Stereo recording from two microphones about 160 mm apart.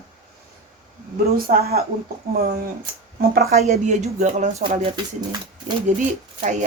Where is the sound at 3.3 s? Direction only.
70° right (ahead or behind).